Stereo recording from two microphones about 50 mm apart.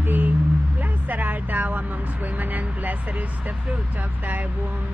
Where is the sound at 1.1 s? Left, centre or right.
Right.